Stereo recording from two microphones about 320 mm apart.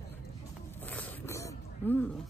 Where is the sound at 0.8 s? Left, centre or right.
Centre.